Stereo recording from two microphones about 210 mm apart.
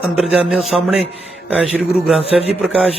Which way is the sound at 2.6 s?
5° right (ahead or behind).